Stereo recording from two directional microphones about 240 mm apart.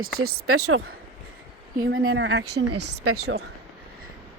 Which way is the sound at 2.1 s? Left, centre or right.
Right.